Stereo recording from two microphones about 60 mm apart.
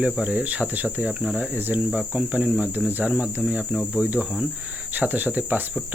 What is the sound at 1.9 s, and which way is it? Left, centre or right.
Cricket, centre.